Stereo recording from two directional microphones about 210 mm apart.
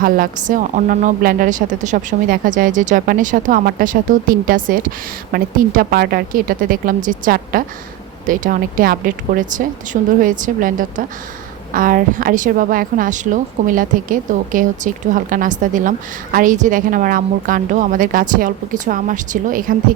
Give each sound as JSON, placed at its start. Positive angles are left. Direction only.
{"t": 0.0, "sound": "a woman's voice", "side_deg": -40}